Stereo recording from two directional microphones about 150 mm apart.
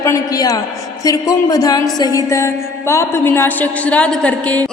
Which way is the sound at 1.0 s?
25° left (ahead or behind).